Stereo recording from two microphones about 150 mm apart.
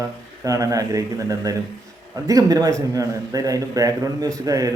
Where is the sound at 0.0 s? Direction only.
20° right (ahead or behind).